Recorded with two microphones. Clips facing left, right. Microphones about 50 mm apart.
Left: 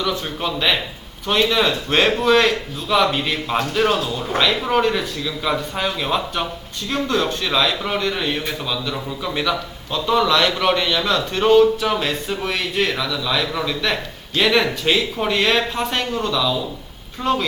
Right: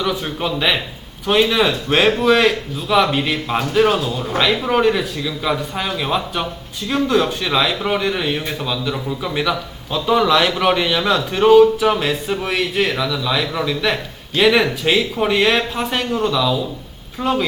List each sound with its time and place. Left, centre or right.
0.0 s a man's voice: centre